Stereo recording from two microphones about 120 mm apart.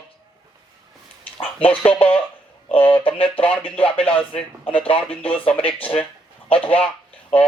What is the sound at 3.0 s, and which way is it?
Speech, 50° left (ahead or behind).